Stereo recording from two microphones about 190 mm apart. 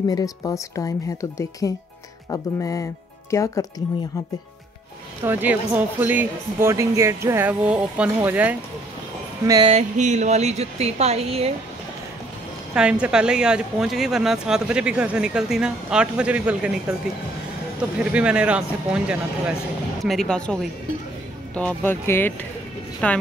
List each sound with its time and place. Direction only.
0.1 s a woman's voice: 20° left (ahead or behind)
5.2 s speech: 10° right (ahead or behind)
9.5 s music: 25° right (ahead or behind)
9.8 s speech: 40° right (ahead or behind)
12.7 s speech: 5° right (ahead or behind)
17.9 s a woman's voice: 5° right (ahead or behind)